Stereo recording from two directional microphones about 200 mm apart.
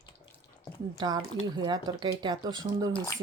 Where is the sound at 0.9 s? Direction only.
20° right (ahead or behind).